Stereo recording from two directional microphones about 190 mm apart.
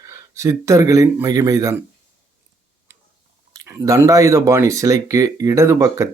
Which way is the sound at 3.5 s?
20° right (ahead or behind).